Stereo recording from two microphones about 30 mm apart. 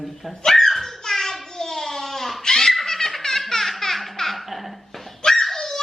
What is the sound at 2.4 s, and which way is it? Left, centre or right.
Giggle, centre.